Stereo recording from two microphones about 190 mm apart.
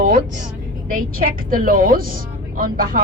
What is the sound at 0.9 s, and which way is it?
A woman's voice, 45° right (ahead or behind).